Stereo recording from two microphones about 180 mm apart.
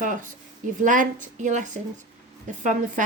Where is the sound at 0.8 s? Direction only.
45° right (ahead or behind).